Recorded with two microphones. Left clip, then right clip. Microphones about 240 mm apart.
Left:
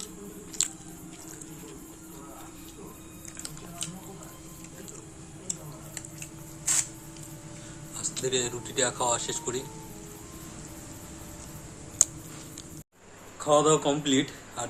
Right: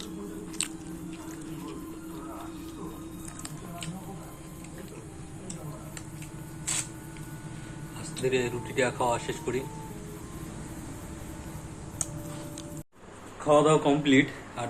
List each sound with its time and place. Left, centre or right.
0.6 s biting: centre
8.2 s speech: centre
12.0 s a sound: left
13.4 s speech: centre